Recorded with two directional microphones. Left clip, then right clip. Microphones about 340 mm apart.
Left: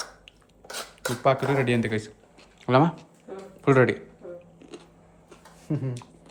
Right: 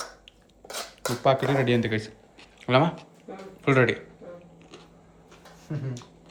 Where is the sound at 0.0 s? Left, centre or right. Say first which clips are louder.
Even; centre.